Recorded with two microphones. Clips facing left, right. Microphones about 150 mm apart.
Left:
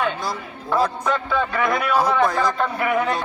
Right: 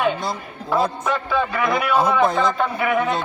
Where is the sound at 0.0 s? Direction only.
25° right (ahead or behind).